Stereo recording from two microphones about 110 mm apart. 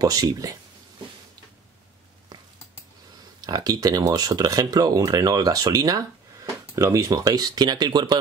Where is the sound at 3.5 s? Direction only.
35° right (ahead or behind).